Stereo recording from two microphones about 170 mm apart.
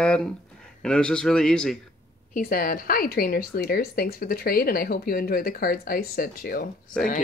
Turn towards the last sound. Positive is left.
turn(degrees=5)  # may be behind; listen again after turning